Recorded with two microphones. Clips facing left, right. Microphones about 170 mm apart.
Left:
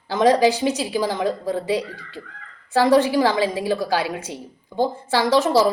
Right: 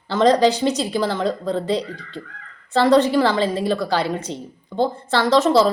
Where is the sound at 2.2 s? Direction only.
15° right (ahead or behind).